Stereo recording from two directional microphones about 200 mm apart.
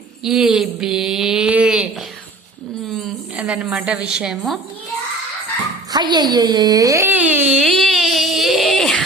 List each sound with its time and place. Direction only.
0.3 s speech: centre (ahead or behind)
2.9 s a woman's voice: 5° right (ahead or behind)
5.9 s speech: 20° right (ahead or behind)
7.6 s a sound: centre (ahead or behind)